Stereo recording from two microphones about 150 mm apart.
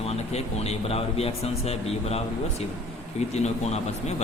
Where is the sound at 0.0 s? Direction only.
45° left (ahead or behind).